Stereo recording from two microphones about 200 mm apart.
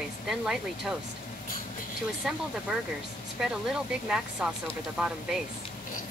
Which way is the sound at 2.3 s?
5° right (ahead or behind).